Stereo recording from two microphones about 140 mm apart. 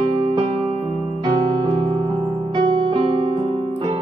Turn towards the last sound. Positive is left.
turn(degrees=-35)  # may be behind; listen again after turning